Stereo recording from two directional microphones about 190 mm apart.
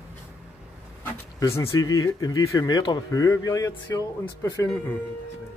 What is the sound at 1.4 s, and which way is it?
Speech, 15° left (ahead or behind).